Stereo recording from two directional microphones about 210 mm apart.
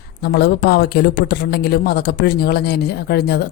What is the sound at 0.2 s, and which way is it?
Speech, 50° left (ahead or behind).